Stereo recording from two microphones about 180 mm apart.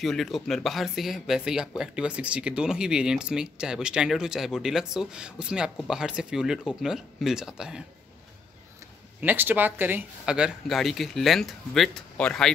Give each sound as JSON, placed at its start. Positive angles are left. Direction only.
{"t": 0.0, "sound": "speech", "side_deg": 0}
{"t": 9.2, "sound": "speech", "side_deg": -10}